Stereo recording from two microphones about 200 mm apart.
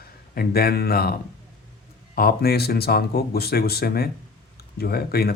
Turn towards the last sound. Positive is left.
turn(degrees=50)  # may be behind; listen again after turning